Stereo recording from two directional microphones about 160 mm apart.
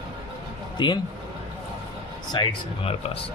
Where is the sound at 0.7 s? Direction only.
30° left (ahead or behind).